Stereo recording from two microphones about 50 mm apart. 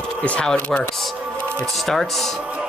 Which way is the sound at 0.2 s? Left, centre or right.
Left.